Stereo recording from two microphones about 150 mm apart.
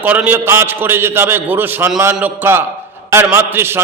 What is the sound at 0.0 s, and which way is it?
A man's voice, 10° right (ahead or behind).